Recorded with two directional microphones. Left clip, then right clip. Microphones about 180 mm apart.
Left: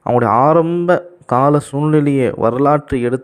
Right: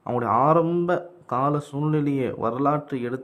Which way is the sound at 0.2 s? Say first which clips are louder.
Left 7 dB; 30° left (ahead or behind).